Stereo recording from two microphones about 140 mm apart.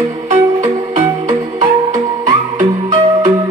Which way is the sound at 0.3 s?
55° right (ahead or behind).